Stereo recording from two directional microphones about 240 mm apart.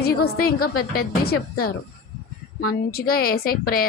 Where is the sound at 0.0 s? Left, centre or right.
Left.